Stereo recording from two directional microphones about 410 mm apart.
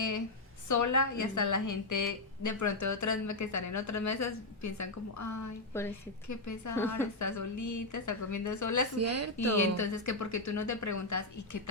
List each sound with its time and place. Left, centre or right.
0.7 s a woman's voice: left
6.7 s a woman's voice: centre
7.2 s a woman's voice: left
9.0 s speech: right
9.6 s a woman's voice: left